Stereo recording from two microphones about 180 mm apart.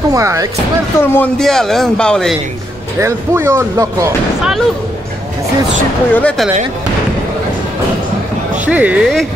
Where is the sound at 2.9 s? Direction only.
15° right (ahead or behind).